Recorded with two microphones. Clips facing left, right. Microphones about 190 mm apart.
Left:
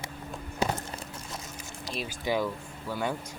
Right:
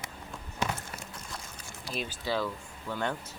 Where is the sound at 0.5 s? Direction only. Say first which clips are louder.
Left 4 dB; 35° left (ahead or behind).